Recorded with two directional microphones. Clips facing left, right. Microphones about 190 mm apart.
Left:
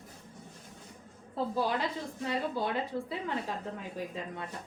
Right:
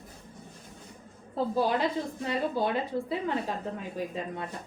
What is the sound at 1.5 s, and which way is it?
A woman's voice, 15° right (ahead or behind).